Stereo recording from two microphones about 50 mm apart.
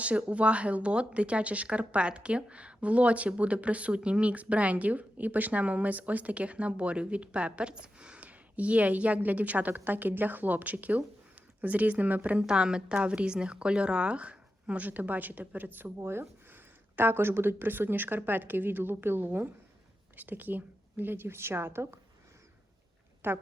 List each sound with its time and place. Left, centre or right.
0.0 s a woman's voice: right
12.5 s speech: centre; by 21.9 s right
23.2 s a woman's voice: right